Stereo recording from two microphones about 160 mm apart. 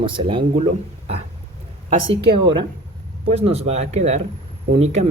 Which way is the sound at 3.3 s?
40° right (ahead or behind).